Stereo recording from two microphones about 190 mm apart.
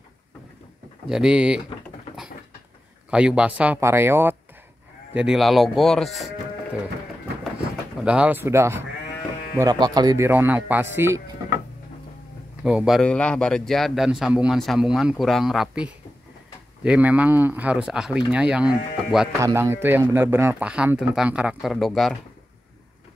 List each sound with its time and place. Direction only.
1.0 s a man's voice: 5° right (ahead or behind)
3.1 s speech: 5° right (ahead or behind)
8.0 s speech: 5° right (ahead or behind)
12.6 s a man's voice: 5° right (ahead or behind)